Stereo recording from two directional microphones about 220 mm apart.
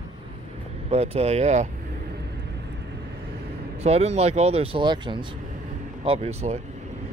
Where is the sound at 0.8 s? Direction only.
30° right (ahead or behind).